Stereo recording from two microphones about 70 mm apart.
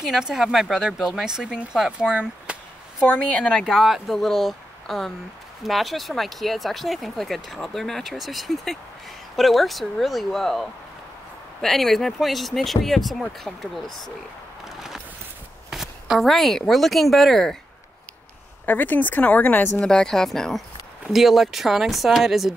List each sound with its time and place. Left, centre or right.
0.0 s speech: centre
3.1 s speech: centre
3.6 s speech: centre
14.6 s a sound: centre
15.7 s speech: centre
18.7 s speech: left
19.8 s speech: centre